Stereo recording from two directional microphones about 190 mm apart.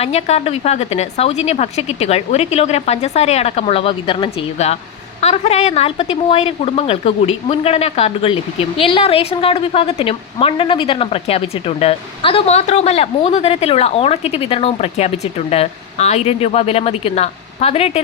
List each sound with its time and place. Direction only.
0.0 s a woman's voice: 35° left (ahead or behind)